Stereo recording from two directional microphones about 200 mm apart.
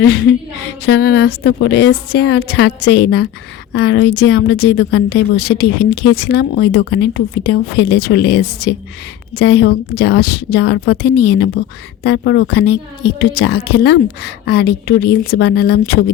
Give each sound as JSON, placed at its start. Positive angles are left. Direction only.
{"t": 0.0, "sound": "speech", "side_deg": 60}